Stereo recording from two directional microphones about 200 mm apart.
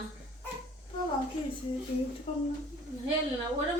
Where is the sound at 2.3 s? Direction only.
30° left (ahead or behind).